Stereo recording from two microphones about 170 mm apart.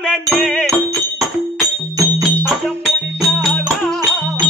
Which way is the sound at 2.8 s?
Centre (ahead or behind).